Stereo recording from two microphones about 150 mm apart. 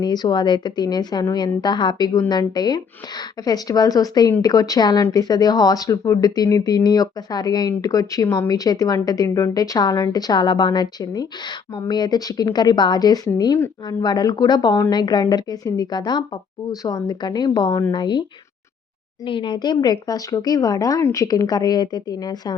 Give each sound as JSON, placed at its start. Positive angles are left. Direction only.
{"t": 0.0, "sound": "speech", "side_deg": 30}
{"t": 19.2, "sound": "speech", "side_deg": 35}